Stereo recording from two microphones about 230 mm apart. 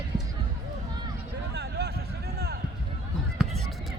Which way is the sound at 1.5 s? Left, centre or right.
Right.